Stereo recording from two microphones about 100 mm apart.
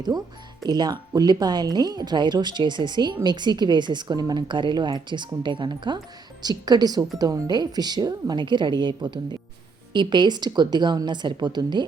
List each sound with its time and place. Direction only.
0.6 s a woman's voice: 45° right (ahead or behind)